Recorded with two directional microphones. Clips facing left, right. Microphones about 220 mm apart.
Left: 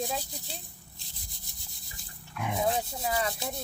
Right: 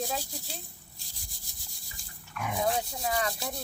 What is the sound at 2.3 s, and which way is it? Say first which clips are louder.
Speech: left 1 dB; 25° left (ahead or behind).